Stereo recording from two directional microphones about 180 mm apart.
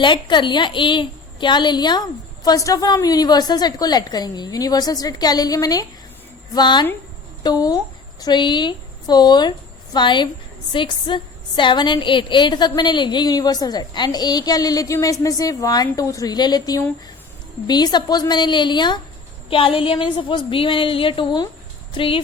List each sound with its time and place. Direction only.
0.0 s a woman's voice: 25° left (ahead or behind)